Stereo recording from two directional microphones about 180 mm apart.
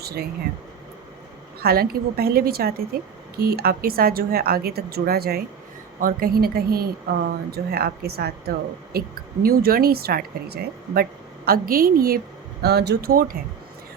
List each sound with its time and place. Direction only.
0.0 s speech: 60° right (ahead or behind)
1.6 s a woman's voice: 55° right (ahead or behind)
12.6 s a woman's voice: 65° right (ahead or behind)